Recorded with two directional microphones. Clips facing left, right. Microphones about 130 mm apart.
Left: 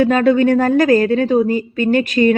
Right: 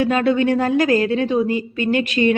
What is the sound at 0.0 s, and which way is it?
Speech, 45° left (ahead or behind).